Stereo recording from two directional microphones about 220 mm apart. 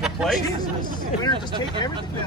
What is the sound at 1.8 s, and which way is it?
Speech, 20° left (ahead or behind).